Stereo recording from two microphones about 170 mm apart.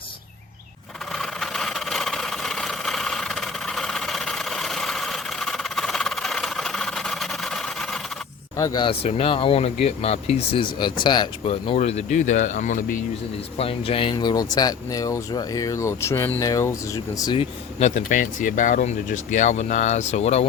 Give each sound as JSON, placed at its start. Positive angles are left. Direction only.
{"t": 1.1, "sound": "vehicle", "side_deg": 0}
{"t": 8.5, "sound": "speech", "side_deg": 20}
{"t": 13.6, "sound": "speech", "side_deg": 35}
{"t": 17.3, "sound": "speech", "side_deg": 35}